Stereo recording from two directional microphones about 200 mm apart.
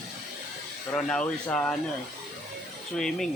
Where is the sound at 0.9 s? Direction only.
5° left (ahead or behind).